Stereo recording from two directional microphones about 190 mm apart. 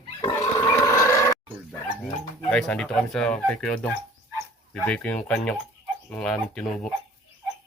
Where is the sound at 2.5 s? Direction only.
5° left (ahead or behind).